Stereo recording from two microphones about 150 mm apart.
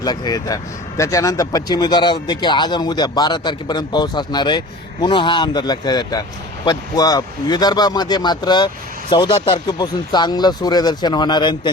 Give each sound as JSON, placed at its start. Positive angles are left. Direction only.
{"t": 0.0, "sound": "speech", "side_deg": 25}